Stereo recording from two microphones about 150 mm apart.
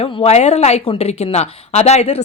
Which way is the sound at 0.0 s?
45° left (ahead or behind).